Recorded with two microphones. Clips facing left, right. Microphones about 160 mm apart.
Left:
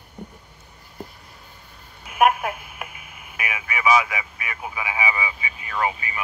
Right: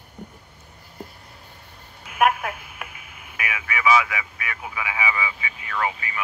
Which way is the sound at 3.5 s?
15° left (ahead or behind).